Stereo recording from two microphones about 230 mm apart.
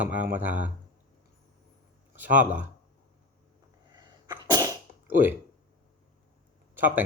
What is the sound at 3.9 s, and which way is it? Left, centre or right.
Sneeze, centre.